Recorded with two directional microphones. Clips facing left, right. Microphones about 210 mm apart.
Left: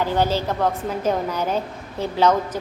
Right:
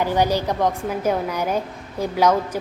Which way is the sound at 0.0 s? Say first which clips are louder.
Right 1 dB; 15° right (ahead or behind).